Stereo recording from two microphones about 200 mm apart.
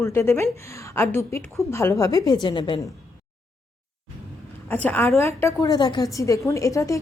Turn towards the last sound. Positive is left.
turn(degrees=15)  # may be behind; listen again after turning